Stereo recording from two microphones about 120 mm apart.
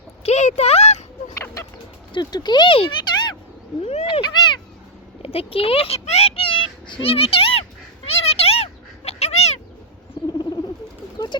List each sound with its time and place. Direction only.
0.2 s a sound: 65° left (ahead or behind)
2.1 s speech: 35° left (ahead or behind)
4.0 s cat: 40° left (ahead or behind)
5.2 s a child's voice: 55° left (ahead or behind)
8.0 s cat: 55° left (ahead or behind)
10.2 s rodents: 35° left (ahead or behind)